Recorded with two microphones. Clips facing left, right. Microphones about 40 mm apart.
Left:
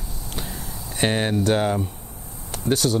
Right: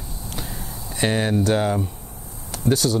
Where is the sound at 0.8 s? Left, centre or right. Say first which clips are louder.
Even; left.